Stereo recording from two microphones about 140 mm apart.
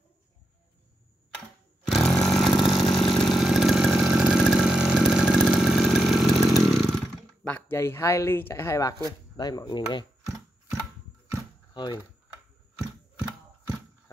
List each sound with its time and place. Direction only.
1.9 s chainsaw: centre (ahead or behind); by 8.9 s 20° left (ahead or behind)
9.4 s speech: 30° left (ahead or behind)
11.7 s speech: 35° left (ahead or behind)